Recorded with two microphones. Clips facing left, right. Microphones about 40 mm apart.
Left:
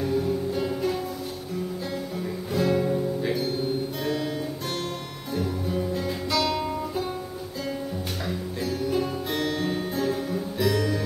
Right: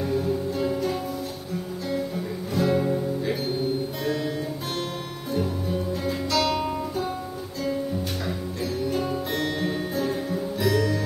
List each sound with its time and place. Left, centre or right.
0.0 s music: centre
2.1 s music: centre
4.0 s music: centre
5.3 s music: centre
8.8 s music: centre